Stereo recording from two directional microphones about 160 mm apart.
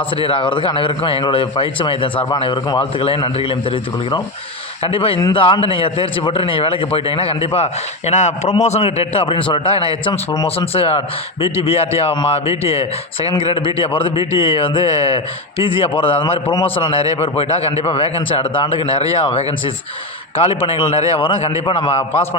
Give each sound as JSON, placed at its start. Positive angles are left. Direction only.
{"t": 0.2, "sound": "a man's voice", "side_deg": 35}